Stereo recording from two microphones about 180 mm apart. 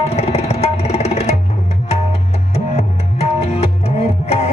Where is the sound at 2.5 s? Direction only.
35° left (ahead or behind).